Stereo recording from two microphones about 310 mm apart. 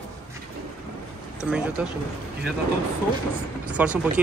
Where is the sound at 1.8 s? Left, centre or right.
Centre.